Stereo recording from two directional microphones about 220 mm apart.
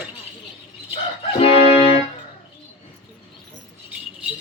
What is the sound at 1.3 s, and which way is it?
Music, 25° left (ahead or behind).